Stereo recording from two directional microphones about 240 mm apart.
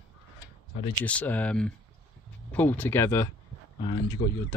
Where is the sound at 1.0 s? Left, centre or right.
Centre.